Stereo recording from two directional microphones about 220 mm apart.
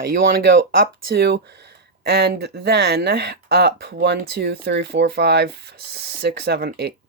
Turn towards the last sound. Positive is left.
turn(degrees=-45)  # may be behind; listen again after turning